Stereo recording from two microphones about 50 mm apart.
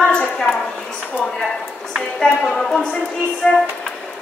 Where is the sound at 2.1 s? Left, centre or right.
Centre.